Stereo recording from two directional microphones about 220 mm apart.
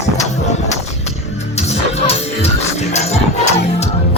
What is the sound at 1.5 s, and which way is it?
Music, 30° left (ahead or behind).